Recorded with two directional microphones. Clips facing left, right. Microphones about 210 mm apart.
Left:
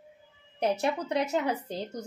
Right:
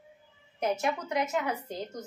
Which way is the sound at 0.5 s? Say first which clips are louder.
Left 2 dB; 30° left (ahead or behind).